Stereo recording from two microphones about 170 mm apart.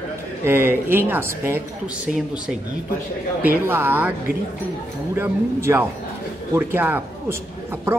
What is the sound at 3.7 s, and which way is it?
Speech, 15° right (ahead or behind).